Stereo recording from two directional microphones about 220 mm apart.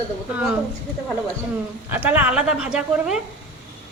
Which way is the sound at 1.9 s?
5° right (ahead or behind).